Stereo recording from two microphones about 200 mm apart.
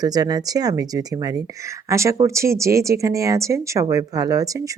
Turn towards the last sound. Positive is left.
turn(degrees=-15)  # may be behind; listen again after turning